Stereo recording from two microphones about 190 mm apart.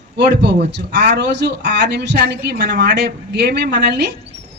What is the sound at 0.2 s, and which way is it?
A man's voice, 65° right (ahead or behind).